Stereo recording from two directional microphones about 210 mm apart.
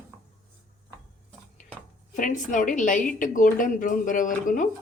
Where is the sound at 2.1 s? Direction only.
40° left (ahead or behind).